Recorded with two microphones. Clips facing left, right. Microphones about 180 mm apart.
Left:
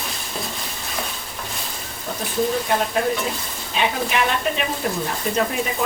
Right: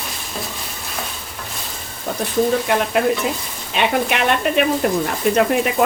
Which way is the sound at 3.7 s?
65° right (ahead or behind).